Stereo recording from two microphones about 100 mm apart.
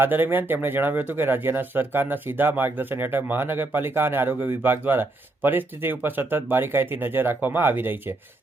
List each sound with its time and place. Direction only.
0.0 s speech: 20° right (ahead or behind)